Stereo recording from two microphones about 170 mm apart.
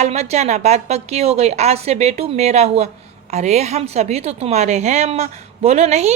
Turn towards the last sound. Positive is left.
turn(degrees=-40)  # may be behind; listen again after turning